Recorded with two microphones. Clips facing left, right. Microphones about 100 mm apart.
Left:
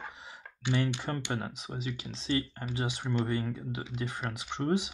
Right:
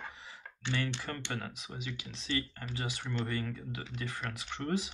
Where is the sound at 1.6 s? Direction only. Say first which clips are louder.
Left 5 dB; 35° left (ahead or behind).